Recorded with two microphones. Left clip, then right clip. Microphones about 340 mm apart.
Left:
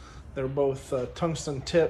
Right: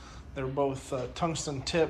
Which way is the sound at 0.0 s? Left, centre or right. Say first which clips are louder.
Left 4 dB; centre.